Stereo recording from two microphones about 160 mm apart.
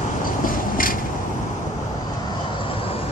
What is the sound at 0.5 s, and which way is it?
Mechanisms, 60° left (ahead or behind).